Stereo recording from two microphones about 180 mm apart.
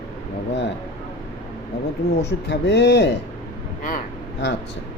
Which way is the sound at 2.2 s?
70° left (ahead or behind).